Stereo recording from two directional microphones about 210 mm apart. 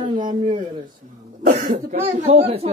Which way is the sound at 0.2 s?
40° right (ahead or behind).